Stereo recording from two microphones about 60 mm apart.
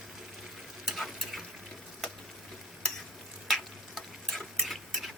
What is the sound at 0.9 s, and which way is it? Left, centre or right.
Stir, centre.